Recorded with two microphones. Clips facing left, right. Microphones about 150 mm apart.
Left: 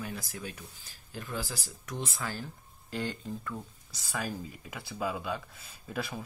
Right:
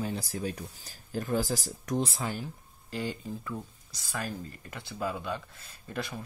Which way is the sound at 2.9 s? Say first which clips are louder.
Right 1 dB; centre (ahead or behind).